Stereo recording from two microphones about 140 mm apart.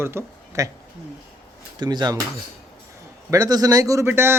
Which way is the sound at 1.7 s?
30° right (ahead or behind).